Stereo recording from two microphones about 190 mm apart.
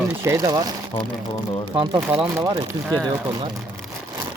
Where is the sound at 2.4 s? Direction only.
20° right (ahead or behind).